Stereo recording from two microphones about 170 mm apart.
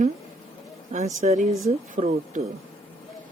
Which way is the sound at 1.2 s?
45° right (ahead or behind).